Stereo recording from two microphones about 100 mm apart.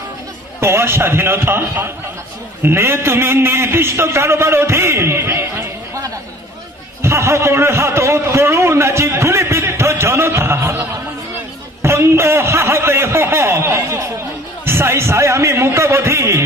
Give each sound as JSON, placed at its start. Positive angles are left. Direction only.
{"t": 0.6, "sound": "a man's voice", "side_deg": -25}